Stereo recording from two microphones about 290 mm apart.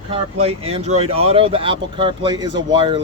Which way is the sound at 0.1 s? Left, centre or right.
Centre.